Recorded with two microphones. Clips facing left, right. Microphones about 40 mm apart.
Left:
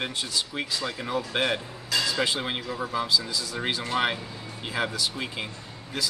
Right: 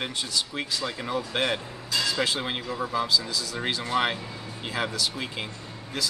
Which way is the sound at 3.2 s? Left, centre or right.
Centre.